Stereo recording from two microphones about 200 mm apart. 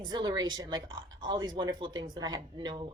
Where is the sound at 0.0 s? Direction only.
20° right (ahead or behind).